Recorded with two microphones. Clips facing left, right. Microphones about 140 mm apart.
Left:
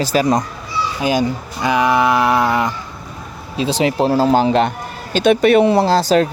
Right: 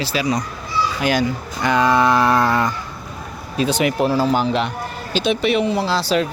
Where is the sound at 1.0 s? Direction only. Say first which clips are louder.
Left 4 dB; 15° left (ahead or behind).